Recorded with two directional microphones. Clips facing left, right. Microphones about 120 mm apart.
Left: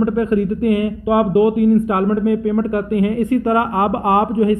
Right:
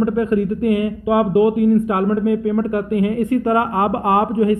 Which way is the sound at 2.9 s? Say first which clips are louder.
Left 1 dB; 25° right (ahead or behind).